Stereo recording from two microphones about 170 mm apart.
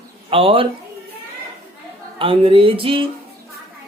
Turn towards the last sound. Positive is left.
turn(degrees=-30)  # may be behind; listen again after turning